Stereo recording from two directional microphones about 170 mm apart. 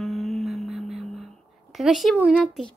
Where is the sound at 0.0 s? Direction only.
Centre (ahead or behind).